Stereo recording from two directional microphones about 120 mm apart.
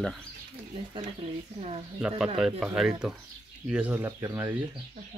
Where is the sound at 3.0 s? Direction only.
5° right (ahead or behind).